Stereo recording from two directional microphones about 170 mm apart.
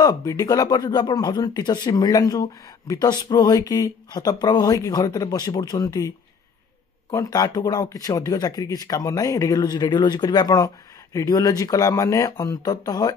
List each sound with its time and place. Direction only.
0.0 s speech: 20° left (ahead or behind)